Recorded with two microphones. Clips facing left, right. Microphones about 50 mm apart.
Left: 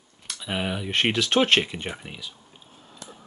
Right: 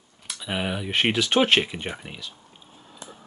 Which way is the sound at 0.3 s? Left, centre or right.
Centre.